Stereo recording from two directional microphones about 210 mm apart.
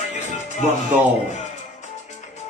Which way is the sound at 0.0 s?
35° left (ahead or behind).